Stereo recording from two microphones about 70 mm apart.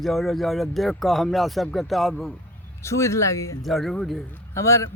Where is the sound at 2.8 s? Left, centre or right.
Left.